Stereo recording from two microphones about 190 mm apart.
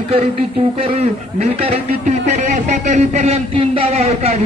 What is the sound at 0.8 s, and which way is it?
A man's voice, 35° right (ahead or behind).